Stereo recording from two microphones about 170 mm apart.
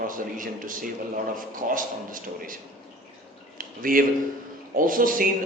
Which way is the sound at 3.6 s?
55° right (ahead or behind).